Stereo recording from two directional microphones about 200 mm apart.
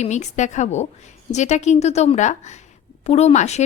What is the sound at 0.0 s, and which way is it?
A woman's voice, 35° left (ahead or behind).